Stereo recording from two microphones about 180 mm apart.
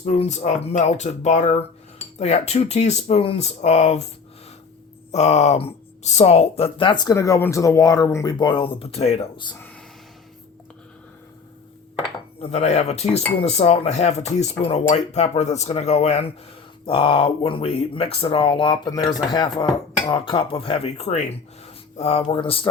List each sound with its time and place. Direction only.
0.0 s speech: 40° left (ahead or behind)
5.1 s speech: 40° left (ahead or behind)
9.5 s a sound: 10° left (ahead or behind)
12.4 s speech: 35° left (ahead or behind)